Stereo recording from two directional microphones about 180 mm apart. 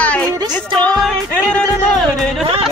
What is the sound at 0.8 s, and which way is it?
Music, centre (ahead or behind).